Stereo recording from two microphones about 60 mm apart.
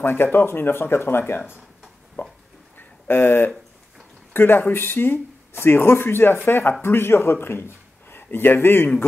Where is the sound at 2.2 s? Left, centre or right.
Left.